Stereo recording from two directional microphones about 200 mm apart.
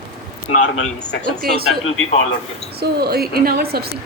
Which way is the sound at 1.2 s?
45° right (ahead or behind).